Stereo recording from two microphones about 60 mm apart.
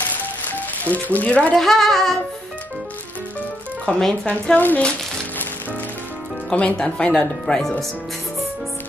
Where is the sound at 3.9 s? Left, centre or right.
Centre.